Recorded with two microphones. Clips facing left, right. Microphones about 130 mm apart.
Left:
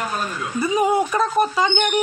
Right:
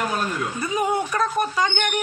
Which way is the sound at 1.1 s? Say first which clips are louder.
Left 4 dB; 25° left (ahead or behind).